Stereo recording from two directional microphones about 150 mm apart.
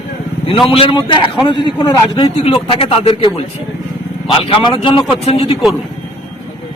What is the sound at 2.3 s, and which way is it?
Speech, 40° left (ahead or behind).